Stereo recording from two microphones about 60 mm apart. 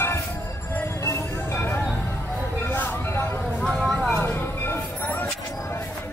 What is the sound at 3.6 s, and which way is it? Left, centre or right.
Vehicle, centre.